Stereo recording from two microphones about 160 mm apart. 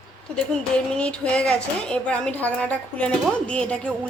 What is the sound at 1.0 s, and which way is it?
A woman's voice, 5° left (ahead or behind).